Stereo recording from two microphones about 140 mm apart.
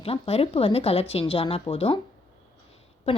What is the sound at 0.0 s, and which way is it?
Speech, 45° left (ahead or behind).